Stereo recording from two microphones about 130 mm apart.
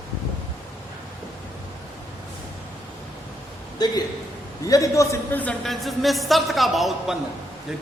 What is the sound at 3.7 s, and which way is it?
A man's voice, 30° left (ahead or behind).